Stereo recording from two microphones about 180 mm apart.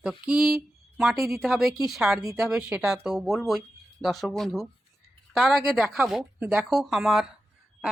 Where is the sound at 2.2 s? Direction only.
15° right (ahead or behind).